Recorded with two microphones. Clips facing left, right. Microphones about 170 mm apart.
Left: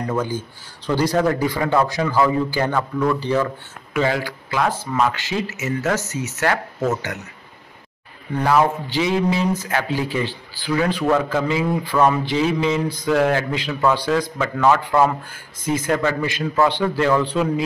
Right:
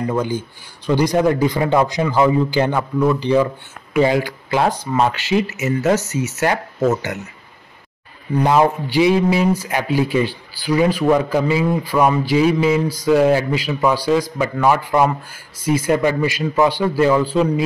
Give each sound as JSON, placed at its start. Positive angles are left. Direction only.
{"t": 0.1, "sound": "speech", "side_deg": -15}
{"t": 5.3, "sound": "speech", "side_deg": -10}
{"t": 8.4, "sound": "speech", "side_deg": -20}